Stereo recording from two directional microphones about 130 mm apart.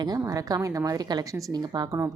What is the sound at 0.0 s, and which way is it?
A woman's voice, 30° right (ahead or behind).